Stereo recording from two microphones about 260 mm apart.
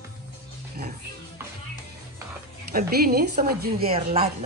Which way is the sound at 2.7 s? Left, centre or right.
Right.